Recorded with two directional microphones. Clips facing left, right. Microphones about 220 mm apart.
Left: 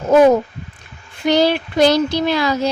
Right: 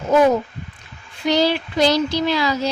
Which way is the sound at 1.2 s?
55° left (ahead or behind).